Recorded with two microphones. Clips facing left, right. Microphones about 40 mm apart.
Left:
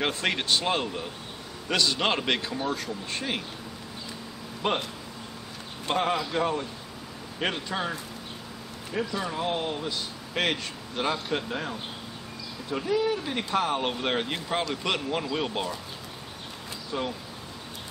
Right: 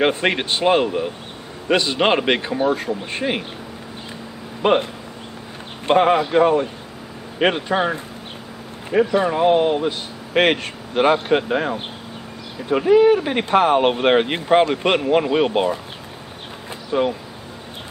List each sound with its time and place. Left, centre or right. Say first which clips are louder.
0.0 s a man's voice: right 9 dB; right
4.6 s speech: right 11 dB; right
5.9 s speech: right 11 dB; right
16.9 s a man's voice: right 12 dB; right